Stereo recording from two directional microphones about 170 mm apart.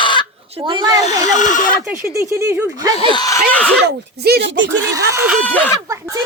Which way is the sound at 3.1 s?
20° left (ahead or behind).